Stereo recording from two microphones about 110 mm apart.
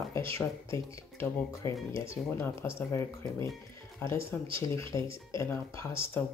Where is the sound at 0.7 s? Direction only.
30° left (ahead or behind).